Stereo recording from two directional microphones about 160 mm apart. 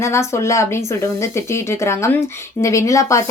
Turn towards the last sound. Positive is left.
turn(degrees=20)  # may be behind; listen again after turning